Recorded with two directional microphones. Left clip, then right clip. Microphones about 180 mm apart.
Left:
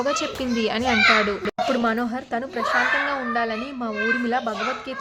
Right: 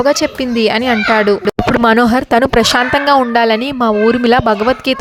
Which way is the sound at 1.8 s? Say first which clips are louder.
Right 14 dB; 65° right (ahead or behind).